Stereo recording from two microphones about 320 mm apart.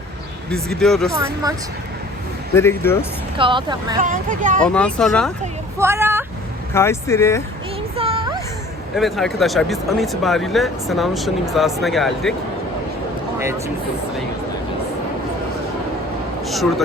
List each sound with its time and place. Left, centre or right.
0.8 s speech: centre
1.1 s speech: centre
2.6 s speech: centre
3.3 s speech: centre
4.6 s speech: centre
6.7 s speech: centre
7.9 s music: centre
9.0 s speech: centre
16.5 s speech: centre